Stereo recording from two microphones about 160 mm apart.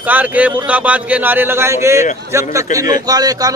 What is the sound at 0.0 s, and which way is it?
A man's voice, 10° right (ahead or behind).